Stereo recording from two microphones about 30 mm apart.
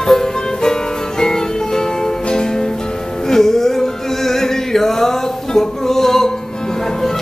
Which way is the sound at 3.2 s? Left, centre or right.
Centre.